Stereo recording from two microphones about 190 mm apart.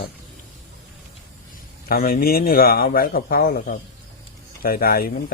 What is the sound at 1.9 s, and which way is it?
Speech, 50° left (ahead or behind).